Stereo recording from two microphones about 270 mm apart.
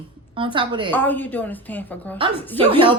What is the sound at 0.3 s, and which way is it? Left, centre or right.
Speech, centre.